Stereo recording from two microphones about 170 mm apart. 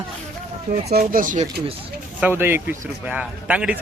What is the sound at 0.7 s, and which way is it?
Speech, 60° right (ahead or behind).